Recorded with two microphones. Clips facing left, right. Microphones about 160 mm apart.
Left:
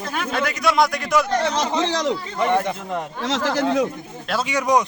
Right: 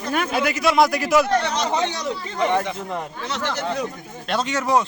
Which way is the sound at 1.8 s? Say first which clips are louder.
Left 3 dB; 90° left.